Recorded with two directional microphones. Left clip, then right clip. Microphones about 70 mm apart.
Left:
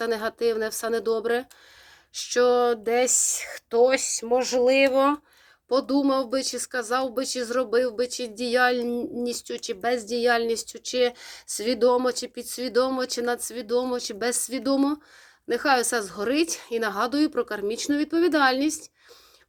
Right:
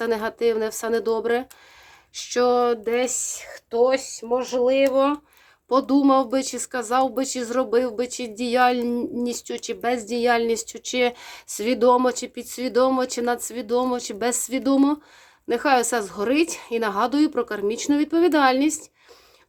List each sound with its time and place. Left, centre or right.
0.0 s speech: right
2.8 s speech: centre
3.2 s speech: left
4.3 s a sound: left
4.8 s speech: left
5.6 s speech: right